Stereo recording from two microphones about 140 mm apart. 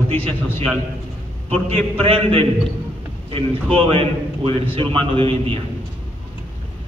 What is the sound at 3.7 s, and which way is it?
A man's voice, 40° right (ahead or behind).